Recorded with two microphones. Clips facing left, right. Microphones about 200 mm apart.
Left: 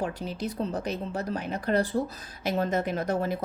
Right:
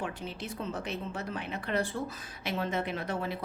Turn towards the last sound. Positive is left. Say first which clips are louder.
# left 6 dB
turn(degrees=45)  # may be behind; listen again after turning